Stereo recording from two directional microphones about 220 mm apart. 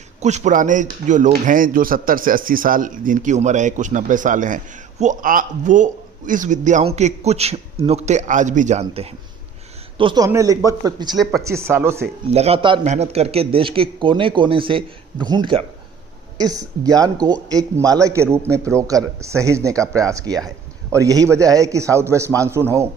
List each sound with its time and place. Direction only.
0.2 s a man's voice: 30° right (ahead or behind)
11.2 s speech: centre (ahead or behind)
11.4 s a man's voice: 10° right (ahead or behind)
12.3 s a man's voice: 30° right (ahead or behind); by 22.9 s 10° right (ahead or behind)